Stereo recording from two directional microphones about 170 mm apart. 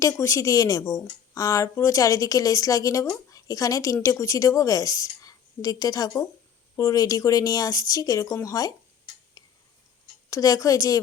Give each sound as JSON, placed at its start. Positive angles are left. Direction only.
{"t": 0.0, "sound": "speech", "side_deg": 20}
{"t": 10.2, "sound": "speech", "side_deg": 20}